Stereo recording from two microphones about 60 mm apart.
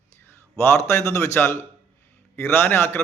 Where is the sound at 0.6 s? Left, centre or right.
Left.